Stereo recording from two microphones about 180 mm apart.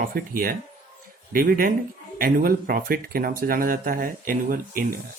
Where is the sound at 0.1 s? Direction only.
50° right (ahead or behind).